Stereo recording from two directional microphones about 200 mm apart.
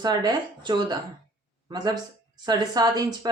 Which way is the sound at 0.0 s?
20° right (ahead or behind).